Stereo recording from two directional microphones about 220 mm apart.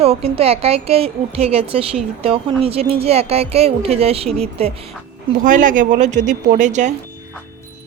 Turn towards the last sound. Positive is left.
turn(degrees=-35)  # may be behind; listen again after turning